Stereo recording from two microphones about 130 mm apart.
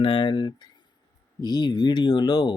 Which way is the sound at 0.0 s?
40° left (ahead or behind).